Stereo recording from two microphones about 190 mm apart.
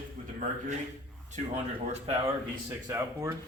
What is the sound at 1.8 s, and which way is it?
Speech, 35° right (ahead or behind).